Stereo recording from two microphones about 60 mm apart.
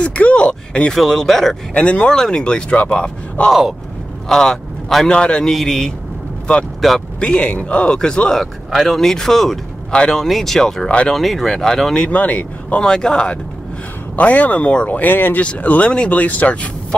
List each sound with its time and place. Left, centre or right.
0.0 s speech: left
0.9 s speech: centre
1.7 s speech: centre
5.5 s speech: centre
7.2 s speech: centre
8.6 s speech: centre
10.2 s speech: centre
10.9 s speech: centre
11.1 s speech: centre; by 12.8 s left
12.8 s speech: centre
14.1 s speech: left
15.4 s speech: left